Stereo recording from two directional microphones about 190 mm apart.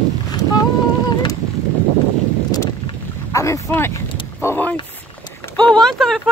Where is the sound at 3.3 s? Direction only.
15° left (ahead or behind).